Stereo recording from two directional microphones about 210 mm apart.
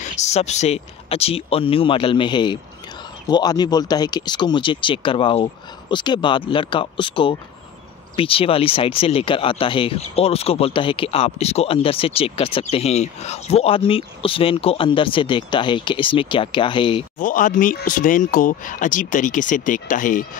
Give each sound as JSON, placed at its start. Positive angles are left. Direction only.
{"t": 0.0, "sound": "speech", "side_deg": 35}
{"t": 17.2, "sound": "speech", "side_deg": 40}